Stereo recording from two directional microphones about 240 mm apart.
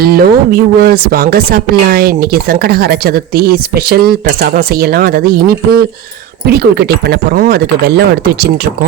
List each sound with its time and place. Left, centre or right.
0.0 s speech: right